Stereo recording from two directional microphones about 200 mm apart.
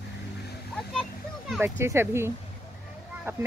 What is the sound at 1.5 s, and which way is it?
Speech, 10° right (ahead or behind).